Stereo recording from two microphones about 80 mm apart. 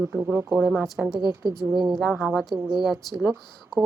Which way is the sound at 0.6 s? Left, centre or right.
Right.